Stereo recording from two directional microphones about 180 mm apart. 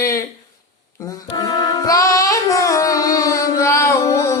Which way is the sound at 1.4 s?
20° left (ahead or behind).